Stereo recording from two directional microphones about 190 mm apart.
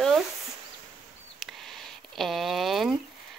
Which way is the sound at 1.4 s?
Centre (ahead or behind).